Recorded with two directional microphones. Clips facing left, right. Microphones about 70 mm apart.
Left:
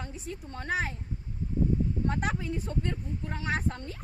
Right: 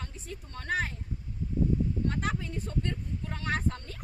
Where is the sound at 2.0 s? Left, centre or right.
Centre.